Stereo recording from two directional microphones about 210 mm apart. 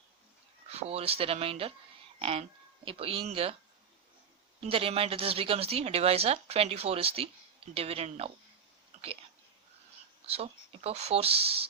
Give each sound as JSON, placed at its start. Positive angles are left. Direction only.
{"t": 0.7, "sound": "a woman's voice", "side_deg": -30}
{"t": 4.6, "sound": "a woman's voice", "side_deg": -25}
{"t": 10.2, "sound": "a woman's voice", "side_deg": -30}